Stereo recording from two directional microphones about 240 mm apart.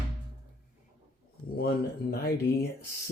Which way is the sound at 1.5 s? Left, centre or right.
Left.